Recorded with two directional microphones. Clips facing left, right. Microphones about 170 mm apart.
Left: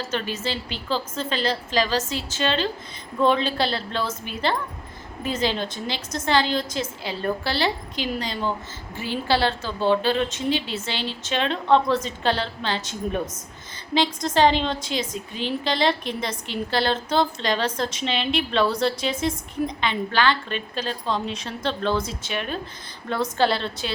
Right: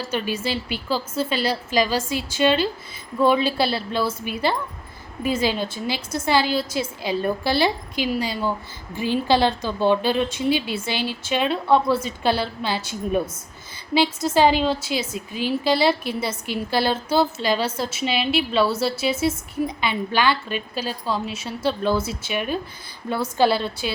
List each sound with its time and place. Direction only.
0.0 s a woman's voice: 10° right (ahead or behind)